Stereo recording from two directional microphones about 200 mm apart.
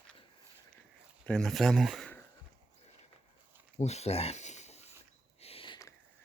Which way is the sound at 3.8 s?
35° left (ahead or behind).